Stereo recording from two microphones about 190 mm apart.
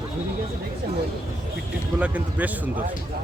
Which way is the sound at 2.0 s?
10° right (ahead or behind).